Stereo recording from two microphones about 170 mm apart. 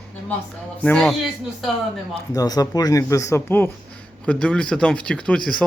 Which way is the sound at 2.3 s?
20° left (ahead or behind).